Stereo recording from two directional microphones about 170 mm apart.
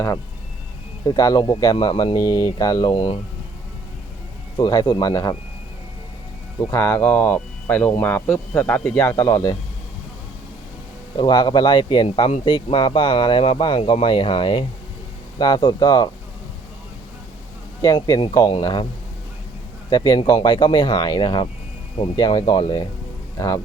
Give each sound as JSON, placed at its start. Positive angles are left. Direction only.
{"t": 1.0, "sound": "speech", "side_deg": 20}
{"t": 2.9, "sound": "speech", "side_deg": 35}
{"t": 4.5, "sound": "speech", "side_deg": 25}
{"t": 6.7, "sound": "speech", "side_deg": 15}
{"t": 11.2, "sound": "speech", "side_deg": 25}
{"t": 17.8, "sound": "speech", "side_deg": 20}
{"t": 19.9, "sound": "speech", "side_deg": 25}